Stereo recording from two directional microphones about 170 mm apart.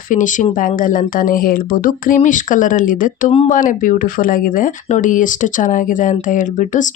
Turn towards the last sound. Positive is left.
turn(degrees=50)  # may be behind; listen again after turning